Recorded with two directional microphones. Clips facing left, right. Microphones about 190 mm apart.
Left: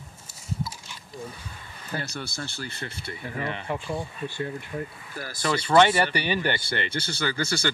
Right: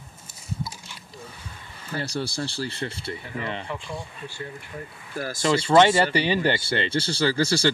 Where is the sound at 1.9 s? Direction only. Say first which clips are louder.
Right 5 dB; 30° right (ahead or behind).